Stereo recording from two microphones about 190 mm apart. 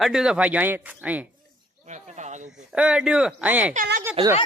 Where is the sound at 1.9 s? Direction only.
40° right (ahead or behind).